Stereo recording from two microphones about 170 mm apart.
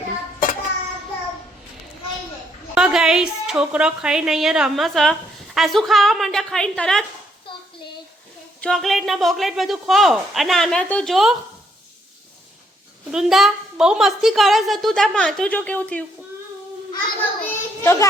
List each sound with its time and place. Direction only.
2.7 s a woman's voice: 5° right (ahead or behind)
8.6 s a woman's voice: centre (ahead or behind)
13.1 s a woman's voice: 5° right (ahead or behind)
17.2 s a child's voice: 15° left (ahead or behind)